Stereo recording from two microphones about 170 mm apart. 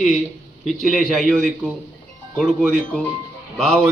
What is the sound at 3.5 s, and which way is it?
Speech, centre (ahead or behind).